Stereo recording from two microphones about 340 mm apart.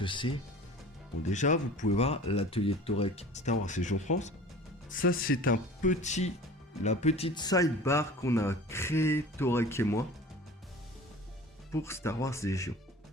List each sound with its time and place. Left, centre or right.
0.0 s speech: centre
11.7 s speech: centre